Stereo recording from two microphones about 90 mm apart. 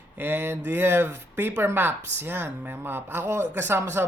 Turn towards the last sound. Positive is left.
turn(degrees=-25)  # may be behind; listen again after turning